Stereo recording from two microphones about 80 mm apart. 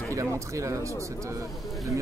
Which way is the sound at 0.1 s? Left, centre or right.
Right.